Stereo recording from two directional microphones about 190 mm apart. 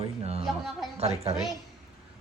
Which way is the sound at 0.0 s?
30° right (ahead or behind).